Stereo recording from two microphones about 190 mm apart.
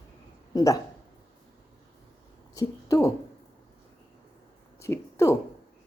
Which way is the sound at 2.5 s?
15° left (ahead or behind).